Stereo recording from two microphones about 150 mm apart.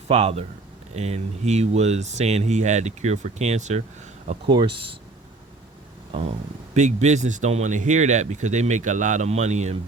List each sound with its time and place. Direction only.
0.1 s speech: 45° right (ahead or behind)
4.4 s speech: 35° right (ahead or behind)
6.7 s speech: 50° right (ahead or behind)